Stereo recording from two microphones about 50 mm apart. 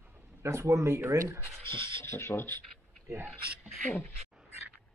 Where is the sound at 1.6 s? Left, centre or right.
Left.